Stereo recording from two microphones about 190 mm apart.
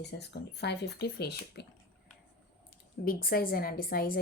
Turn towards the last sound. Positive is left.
turn(degrees=50)  # may be behind; listen again after turning